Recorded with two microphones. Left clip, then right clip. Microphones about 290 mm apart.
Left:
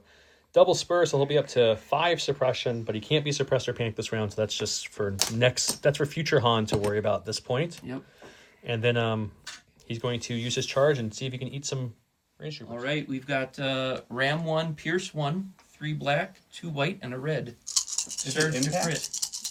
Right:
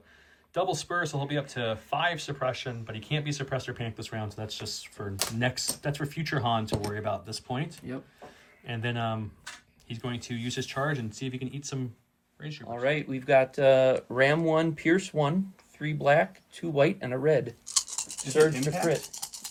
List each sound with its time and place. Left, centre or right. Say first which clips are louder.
0.5 s speech: left 8 dB; centre
12.8 s speech: right 3 dB; right